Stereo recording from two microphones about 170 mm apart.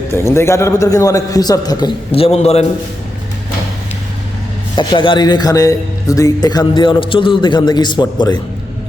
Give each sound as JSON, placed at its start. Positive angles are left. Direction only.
{"t": 0.1, "sound": "a man's voice", "side_deg": 15}
{"t": 4.8, "sound": "a man's voice", "side_deg": 25}